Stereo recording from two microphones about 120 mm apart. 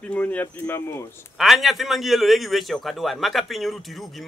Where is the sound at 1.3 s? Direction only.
Centre (ahead or behind).